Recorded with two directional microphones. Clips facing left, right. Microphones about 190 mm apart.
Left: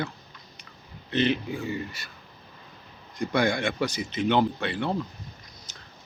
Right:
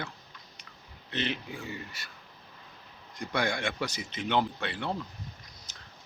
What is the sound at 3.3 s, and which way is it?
Speech, 10° left (ahead or behind).